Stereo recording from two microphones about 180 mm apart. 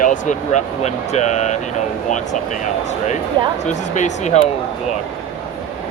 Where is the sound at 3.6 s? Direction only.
40° left (ahead or behind).